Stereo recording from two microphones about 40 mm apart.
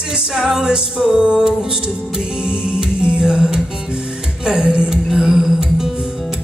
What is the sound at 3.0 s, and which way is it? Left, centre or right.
Music, right.